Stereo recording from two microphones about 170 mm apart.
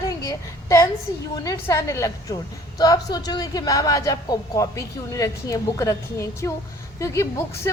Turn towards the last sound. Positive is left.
turn(degrees=15)  # may be behind; listen again after turning